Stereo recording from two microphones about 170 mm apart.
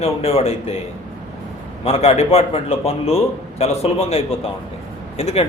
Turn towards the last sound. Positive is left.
turn(degrees=35)  # may be behind; listen again after turning